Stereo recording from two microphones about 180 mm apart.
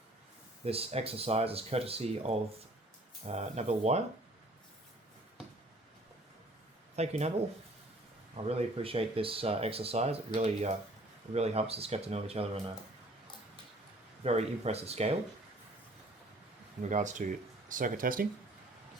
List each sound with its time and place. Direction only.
0.6 s speech: 35° right (ahead or behind)
6.9 s speech: 35° right (ahead or behind)
8.4 s speech: 35° right (ahead or behind)
14.3 s speech: 35° right (ahead or behind)
16.9 s speech: 45° right (ahead or behind)